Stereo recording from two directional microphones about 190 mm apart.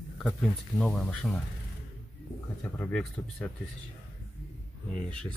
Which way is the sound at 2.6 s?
5° left (ahead or behind).